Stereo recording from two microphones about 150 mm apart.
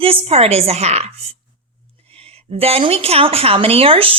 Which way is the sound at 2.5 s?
40° right (ahead or behind).